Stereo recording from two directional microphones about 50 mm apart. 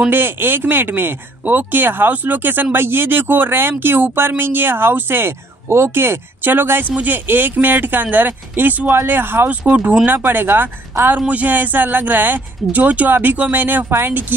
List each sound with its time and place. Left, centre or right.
0.1 s speech: right
11.1 s speech: right